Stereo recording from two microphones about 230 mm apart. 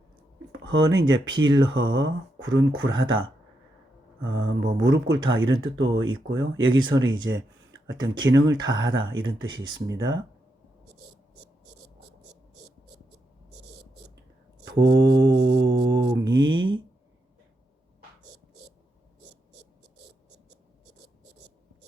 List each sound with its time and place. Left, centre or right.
0.7 s speech: right
8.4 s speech: centre
8.7 s speech: right
9.5 s speech: centre
9.7 s speech: right
11.6 s a sound: right
14.8 s mantra: right